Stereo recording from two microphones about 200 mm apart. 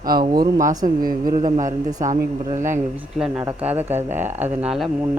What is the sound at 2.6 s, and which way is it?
Speech, 40° right (ahead or behind).